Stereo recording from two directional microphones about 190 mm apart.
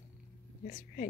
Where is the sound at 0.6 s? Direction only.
40° left (ahead or behind).